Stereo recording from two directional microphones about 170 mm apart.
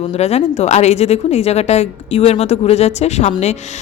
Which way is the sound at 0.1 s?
40° left (ahead or behind).